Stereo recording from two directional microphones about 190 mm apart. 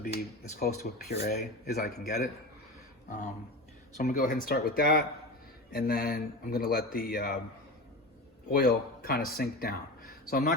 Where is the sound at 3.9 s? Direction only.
40° left (ahead or behind).